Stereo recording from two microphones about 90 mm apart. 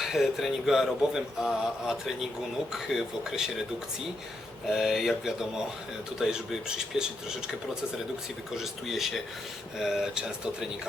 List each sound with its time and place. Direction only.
0.0 s speech: centre (ahead or behind)
4.7 s speech: centre (ahead or behind)
8.5 s speech: 5° right (ahead or behind)